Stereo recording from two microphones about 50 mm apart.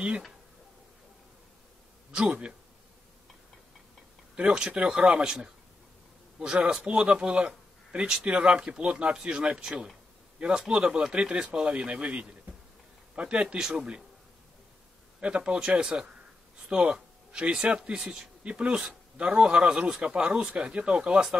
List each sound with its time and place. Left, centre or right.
2.1 s speech: right
4.4 s speech: centre
8.1 s speech: centre
15.1 s speech: right
18.0 s speech: centre
18.4 s speech: right